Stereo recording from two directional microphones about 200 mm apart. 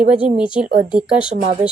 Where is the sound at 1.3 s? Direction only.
35° right (ahead or behind).